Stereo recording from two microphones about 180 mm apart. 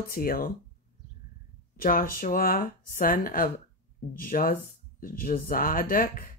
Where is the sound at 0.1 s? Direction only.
55° left (ahead or behind).